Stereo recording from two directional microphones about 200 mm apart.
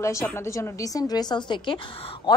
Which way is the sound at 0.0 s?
15° left (ahead or behind).